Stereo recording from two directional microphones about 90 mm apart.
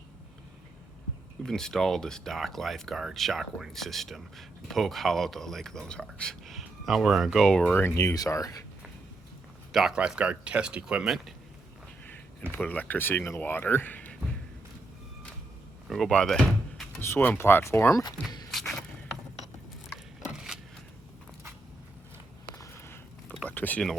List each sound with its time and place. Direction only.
1.5 s speech: 5° left (ahead or behind)
7.4 s speech: 10° left (ahead or behind)
7.7 s speech: 25° left (ahead or behind)
8.1 s speech: 40° left (ahead or behind)
9.7 s speech: 10° right (ahead or behind)
12.5 s speech: 15° left (ahead or behind)
15.9 s speech: 5° left (ahead or behind)
17.0 s speech: 25° left (ahead or behind)
18.5 s a sound: 5° left (ahead or behind)
20.3 s a sound: 5° right (ahead or behind)
22.5 s a sound: 35° left (ahead or behind)
23.5 s a sound: 20° left (ahead or behind)